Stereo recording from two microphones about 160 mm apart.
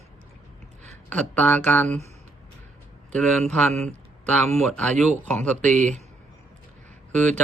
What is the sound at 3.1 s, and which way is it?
Speech, 5° left (ahead or behind).